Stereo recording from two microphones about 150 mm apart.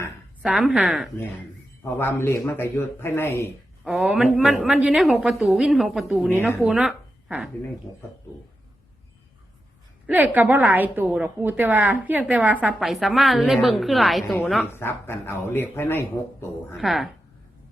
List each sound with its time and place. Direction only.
0.4 s a woman's voice: 5° right (ahead or behind)
1.8 s a man's voice: 15° left (ahead or behind)
3.8 s a woman's voice: 5° right (ahead or behind)
10.1 s a woman's voice: 10° right (ahead or behind)
14.7 s a man's voice: 15° left (ahead or behind)
16.7 s a woman's voice: centre (ahead or behind)